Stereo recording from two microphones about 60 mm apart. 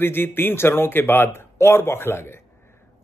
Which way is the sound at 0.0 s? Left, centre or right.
Left.